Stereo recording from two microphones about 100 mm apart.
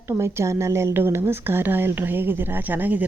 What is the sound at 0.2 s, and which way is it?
Speech, 25° right (ahead or behind).